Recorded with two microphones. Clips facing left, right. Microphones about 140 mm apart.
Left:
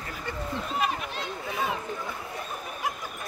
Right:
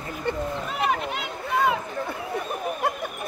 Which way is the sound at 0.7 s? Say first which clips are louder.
Right 4 dB; 75° right (ahead or behind).